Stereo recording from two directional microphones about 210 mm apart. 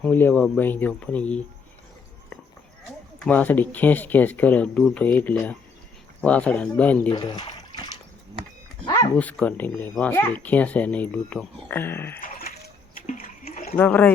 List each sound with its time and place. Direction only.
0.0 s speech: 10° left (ahead or behind)
3.2 s speech: 10° left (ahead or behind)
7.1 s speech: 20° left (ahead or behind)
8.8 s a sound: 20° left (ahead or behind)
9.1 s speech: 5° left (ahead or behind)
13.1 s a sound: 40° left (ahead or behind)
13.7 s speech: 10° left (ahead or behind)